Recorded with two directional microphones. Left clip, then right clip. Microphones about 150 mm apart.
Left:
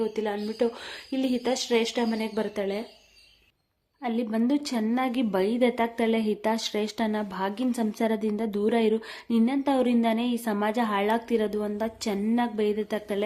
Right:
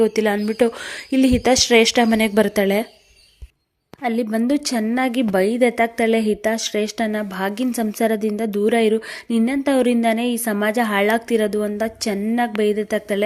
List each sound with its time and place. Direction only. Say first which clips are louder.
0.0 s a woman's voice: right 11 dB; 40° right (ahead or behind)
4.0 s a woman's voice: right 7 dB; 35° right (ahead or behind)
6.4 s a woman's voice: right 7 dB; 10° right (ahead or behind)